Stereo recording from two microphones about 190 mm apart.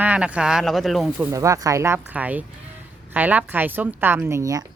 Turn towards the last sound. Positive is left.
turn(degrees=-15)  # may be behind; listen again after turning